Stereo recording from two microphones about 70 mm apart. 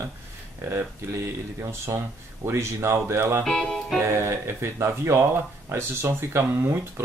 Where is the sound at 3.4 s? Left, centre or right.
Centre.